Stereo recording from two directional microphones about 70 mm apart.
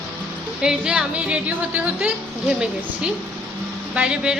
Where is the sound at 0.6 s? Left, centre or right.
Centre.